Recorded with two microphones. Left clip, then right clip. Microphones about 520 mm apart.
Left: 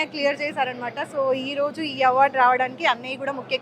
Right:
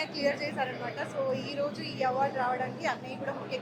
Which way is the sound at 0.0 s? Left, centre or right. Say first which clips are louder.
Left 7 dB; left.